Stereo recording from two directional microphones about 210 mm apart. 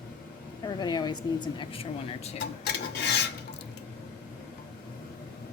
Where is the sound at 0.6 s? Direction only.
20° left (ahead or behind).